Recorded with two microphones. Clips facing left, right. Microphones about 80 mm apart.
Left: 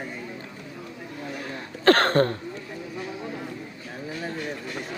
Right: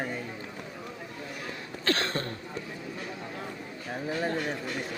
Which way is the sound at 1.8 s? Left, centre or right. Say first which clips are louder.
Left 11 dB; left.